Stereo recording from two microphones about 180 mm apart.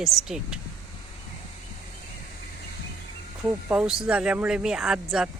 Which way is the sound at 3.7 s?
5° right (ahead or behind).